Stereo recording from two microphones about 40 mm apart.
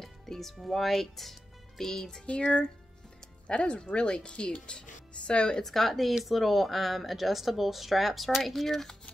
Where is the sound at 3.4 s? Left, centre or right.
Left.